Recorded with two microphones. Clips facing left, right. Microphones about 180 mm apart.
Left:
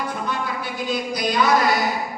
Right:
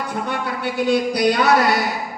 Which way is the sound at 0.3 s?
70° right (ahead or behind).